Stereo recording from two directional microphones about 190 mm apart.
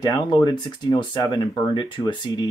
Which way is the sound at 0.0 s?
20° left (ahead or behind).